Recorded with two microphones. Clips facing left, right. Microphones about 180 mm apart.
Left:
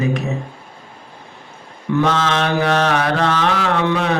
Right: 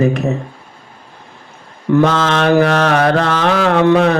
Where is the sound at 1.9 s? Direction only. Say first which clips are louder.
Right 5 dB; 45° right (ahead or behind).